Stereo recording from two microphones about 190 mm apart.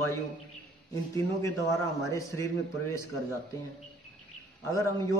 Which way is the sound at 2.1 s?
15° left (ahead or behind).